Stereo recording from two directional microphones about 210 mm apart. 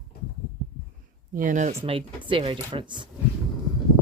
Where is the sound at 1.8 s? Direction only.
25° right (ahead or behind).